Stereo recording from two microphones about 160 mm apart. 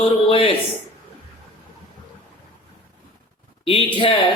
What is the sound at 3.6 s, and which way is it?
Music, 35° left (ahead or behind).